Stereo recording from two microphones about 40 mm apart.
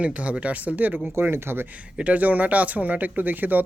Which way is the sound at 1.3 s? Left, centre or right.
Right.